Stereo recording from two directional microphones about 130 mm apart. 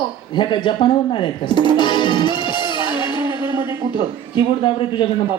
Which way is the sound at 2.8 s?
30° right (ahead or behind).